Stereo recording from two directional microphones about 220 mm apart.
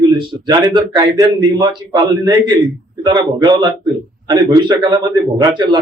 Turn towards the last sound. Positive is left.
turn(degrees=-20)  # may be behind; listen again after turning